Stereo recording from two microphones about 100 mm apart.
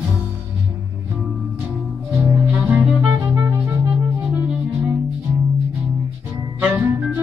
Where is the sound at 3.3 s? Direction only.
25° right (ahead or behind).